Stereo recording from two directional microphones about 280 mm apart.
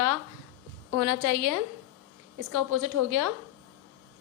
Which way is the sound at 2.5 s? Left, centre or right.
Right.